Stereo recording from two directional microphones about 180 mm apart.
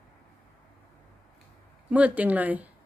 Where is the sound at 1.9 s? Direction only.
10° right (ahead or behind).